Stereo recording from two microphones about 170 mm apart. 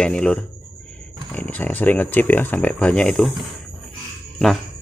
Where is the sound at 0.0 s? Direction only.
5° left (ahead or behind).